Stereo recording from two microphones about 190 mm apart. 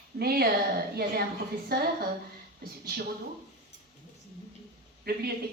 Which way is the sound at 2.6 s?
50° right (ahead or behind).